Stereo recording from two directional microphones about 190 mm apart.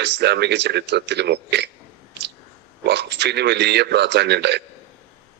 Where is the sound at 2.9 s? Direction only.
60° right (ahead or behind).